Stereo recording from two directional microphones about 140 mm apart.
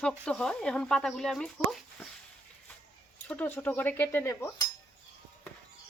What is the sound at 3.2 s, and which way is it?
Speech, 10° left (ahead or behind).